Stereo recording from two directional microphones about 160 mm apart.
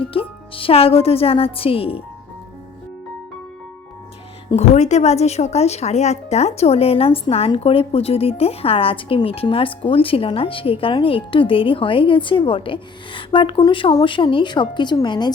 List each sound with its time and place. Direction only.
0.0 s speech: 35° left (ahead or behind)
4.5 s speech: 45° left (ahead or behind); by 15.3 s 30° left (ahead or behind)